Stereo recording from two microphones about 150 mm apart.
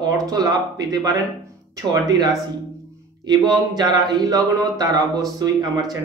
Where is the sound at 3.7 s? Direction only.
30° right (ahead or behind).